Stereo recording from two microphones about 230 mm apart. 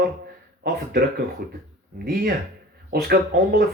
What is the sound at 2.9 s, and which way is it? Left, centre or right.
Speech, right.